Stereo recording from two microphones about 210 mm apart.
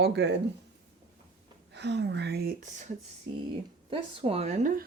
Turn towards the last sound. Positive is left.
turn(degrees=-35)  # may be behind; listen again after turning